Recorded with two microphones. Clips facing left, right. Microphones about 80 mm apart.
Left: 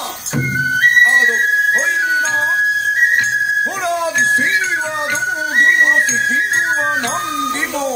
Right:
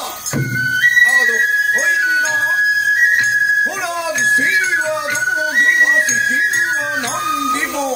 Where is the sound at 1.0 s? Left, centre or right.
Left.